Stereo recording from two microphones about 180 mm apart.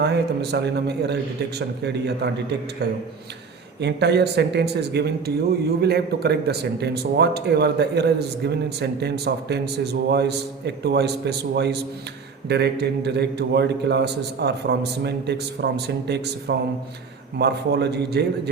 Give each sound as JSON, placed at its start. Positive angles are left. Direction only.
{"t": 0.0, "sound": "a man's voice", "side_deg": -70}